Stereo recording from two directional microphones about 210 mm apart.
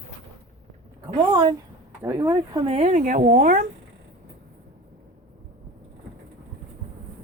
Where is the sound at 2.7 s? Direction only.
35° right (ahead or behind).